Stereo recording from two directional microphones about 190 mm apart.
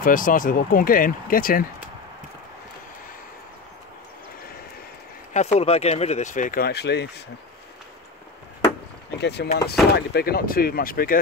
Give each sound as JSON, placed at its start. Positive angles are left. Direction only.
{"t": 0.0, "sound": "speech", "side_deg": 45}
{"t": 5.3, "sound": "speech", "side_deg": 35}
{"t": 9.2, "sound": "speech", "side_deg": 60}